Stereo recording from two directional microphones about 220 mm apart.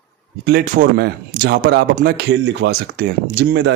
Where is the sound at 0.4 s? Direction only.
40° right (ahead or behind).